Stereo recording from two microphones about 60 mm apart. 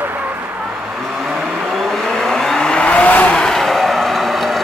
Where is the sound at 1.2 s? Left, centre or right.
Centre; by 3.2 s left.